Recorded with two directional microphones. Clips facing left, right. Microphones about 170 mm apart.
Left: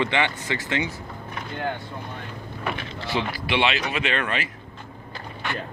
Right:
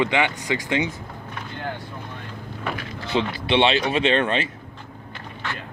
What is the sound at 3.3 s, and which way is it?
Speech, 25° right (ahead or behind).